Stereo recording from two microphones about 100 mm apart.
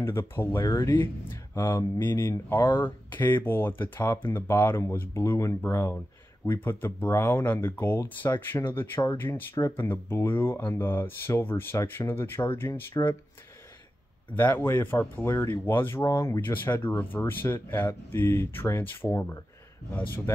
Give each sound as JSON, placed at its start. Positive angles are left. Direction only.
{"t": 0.0, "sound": "speech", "side_deg": 25}
{"t": 14.3, "sound": "speech", "side_deg": 20}